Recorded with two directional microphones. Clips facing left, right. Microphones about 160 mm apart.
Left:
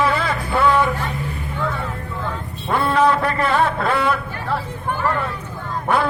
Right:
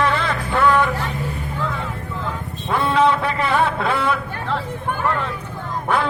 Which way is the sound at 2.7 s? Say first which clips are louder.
Even; centre (ahead or behind).